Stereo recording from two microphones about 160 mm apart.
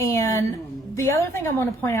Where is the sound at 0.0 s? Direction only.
20° left (ahead or behind).